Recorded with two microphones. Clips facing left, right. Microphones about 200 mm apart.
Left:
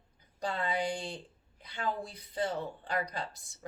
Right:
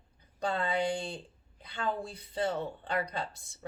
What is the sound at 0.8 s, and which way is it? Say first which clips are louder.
Speech: right 3 dB; 25° right (ahead or behind).